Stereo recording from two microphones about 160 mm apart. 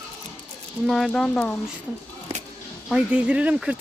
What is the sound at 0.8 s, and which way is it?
Speech, centre (ahead or behind).